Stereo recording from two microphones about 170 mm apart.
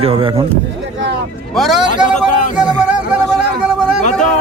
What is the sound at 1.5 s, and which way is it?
Speech, centre (ahead or behind).